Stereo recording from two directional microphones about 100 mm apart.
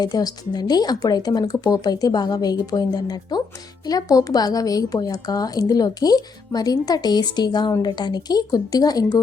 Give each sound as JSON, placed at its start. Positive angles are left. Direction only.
{"t": 0.0, "sound": "a woman's voice", "side_deg": 40}